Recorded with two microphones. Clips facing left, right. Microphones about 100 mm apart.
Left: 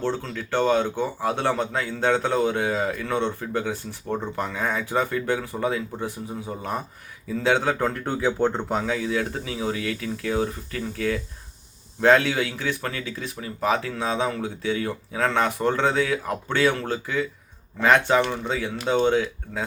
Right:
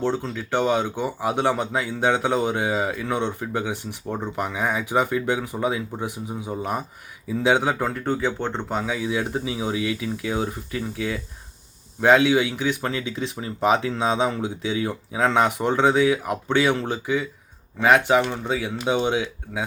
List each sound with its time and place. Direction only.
0.0 s speech: 15° right (ahead or behind); by 8.9 s centre (ahead or behind)
8.9 s speech: 15° right (ahead or behind)